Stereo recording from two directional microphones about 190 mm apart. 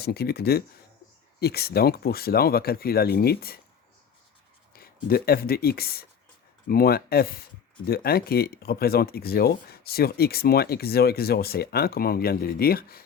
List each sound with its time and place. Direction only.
0.0 s speech: 55° left (ahead or behind)
5.0 s speech: 55° left (ahead or behind)